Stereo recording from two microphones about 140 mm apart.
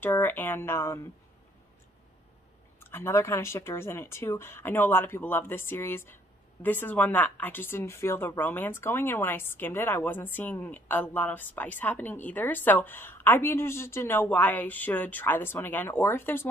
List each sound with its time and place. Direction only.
0.0 s speech: 15° left (ahead or behind)
2.8 s speech: 15° left (ahead or behind)